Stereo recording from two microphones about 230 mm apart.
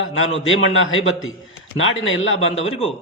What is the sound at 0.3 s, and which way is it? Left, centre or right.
Speech, left.